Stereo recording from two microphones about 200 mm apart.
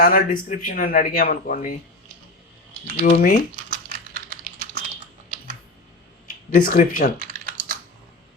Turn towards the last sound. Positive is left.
turn(degrees=-45)  # may be behind; listen again after turning